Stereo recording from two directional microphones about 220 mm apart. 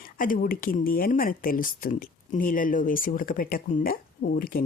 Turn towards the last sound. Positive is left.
turn(degrees=40)  # may be behind; listen again after turning